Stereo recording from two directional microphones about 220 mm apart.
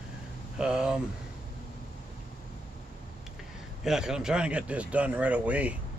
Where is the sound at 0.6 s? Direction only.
5° right (ahead or behind).